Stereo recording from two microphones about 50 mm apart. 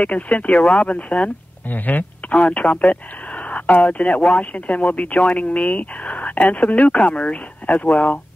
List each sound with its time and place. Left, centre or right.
0.0 s speech: left